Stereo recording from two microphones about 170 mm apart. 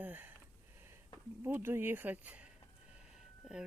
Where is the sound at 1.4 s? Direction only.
10° right (ahead or behind).